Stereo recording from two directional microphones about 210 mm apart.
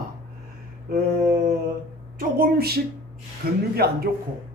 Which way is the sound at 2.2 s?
45° right (ahead or behind).